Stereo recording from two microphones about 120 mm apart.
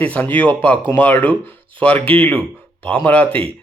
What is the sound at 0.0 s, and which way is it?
A man's voice, 15° left (ahead or behind).